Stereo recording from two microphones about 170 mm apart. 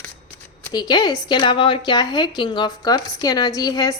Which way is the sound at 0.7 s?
25° left (ahead or behind).